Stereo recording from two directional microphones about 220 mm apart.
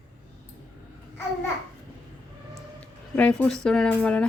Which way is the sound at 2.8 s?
5° left (ahead or behind).